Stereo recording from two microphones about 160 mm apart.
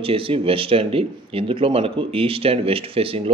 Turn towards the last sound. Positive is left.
turn(degrees=-35)  # may be behind; listen again after turning